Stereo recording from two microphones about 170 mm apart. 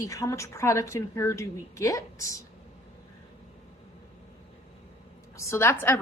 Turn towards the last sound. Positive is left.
turn(degrees=15)  # may be behind; listen again after turning